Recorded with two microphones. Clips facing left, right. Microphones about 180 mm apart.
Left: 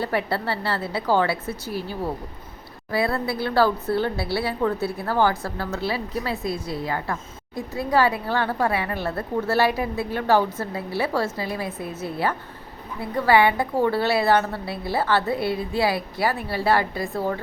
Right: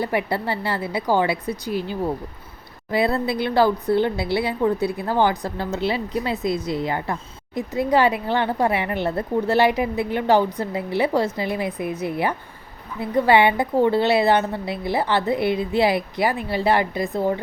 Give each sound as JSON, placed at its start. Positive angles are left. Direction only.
{"t": 0.0, "sound": "a woman's voice", "side_deg": -15}